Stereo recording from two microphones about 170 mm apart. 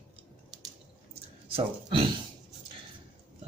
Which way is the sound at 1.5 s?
30° right (ahead or behind).